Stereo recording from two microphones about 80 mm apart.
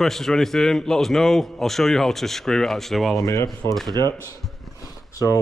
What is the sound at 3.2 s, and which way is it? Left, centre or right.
Speech, left.